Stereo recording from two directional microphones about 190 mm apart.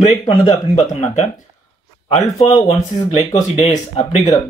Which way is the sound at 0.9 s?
40° left (ahead or behind).